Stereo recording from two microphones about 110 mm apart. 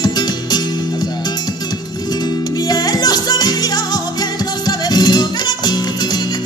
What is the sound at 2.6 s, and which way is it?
Music of latin america, 40° left (ahead or behind).